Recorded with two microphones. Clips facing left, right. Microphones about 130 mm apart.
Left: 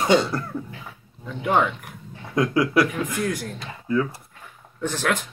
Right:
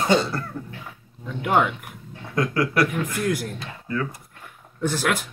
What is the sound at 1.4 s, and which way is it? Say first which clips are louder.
Speech: even; 5° right (ahead or behind).